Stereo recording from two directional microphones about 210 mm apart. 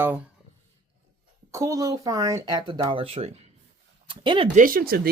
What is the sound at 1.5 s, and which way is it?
Speech, 15° right (ahead or behind).